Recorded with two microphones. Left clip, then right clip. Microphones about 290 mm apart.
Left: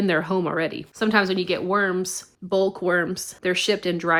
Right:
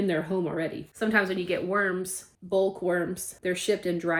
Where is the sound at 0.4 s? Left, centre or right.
Left.